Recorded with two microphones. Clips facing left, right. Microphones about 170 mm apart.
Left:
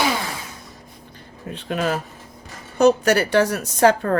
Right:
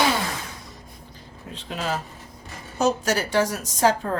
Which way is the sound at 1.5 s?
60° left (ahead or behind).